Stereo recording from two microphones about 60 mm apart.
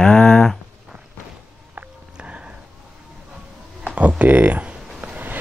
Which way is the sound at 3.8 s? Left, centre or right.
Right.